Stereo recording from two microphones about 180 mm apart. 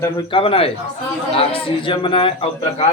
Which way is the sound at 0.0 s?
30° left (ahead or behind).